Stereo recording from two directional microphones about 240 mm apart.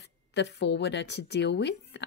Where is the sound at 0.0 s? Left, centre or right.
Left.